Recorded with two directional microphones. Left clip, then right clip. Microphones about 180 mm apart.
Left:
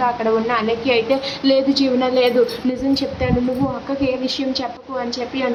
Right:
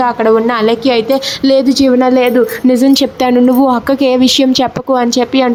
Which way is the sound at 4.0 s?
50° right (ahead or behind).